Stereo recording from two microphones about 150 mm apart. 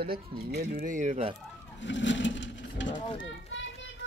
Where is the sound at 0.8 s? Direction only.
55° right (ahead or behind).